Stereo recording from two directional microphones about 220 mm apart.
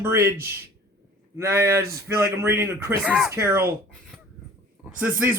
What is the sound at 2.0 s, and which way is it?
Speech, 10° right (ahead or behind).